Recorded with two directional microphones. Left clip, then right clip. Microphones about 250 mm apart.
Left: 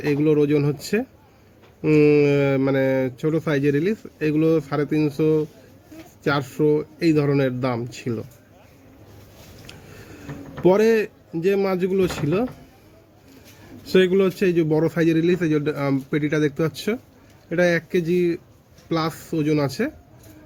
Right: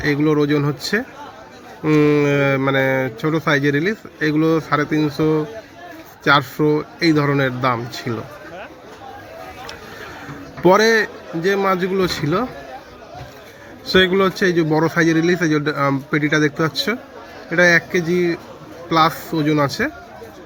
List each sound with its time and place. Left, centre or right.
0.0 s speech: centre
10.7 s speech: centre
13.8 s speech: centre